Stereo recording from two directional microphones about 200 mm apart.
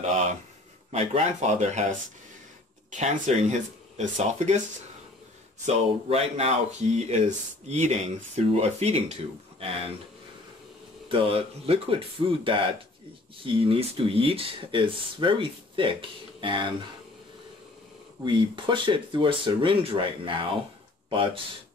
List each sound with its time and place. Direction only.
0.9 s speech: 35° right (ahead or behind)
5.7 s speech: 30° right (ahead or behind)
11.1 s speech: 30° right (ahead or behind)
18.2 s speech: 25° right (ahead or behind)